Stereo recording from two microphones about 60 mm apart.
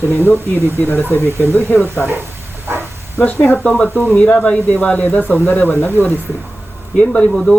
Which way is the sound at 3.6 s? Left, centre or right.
Centre.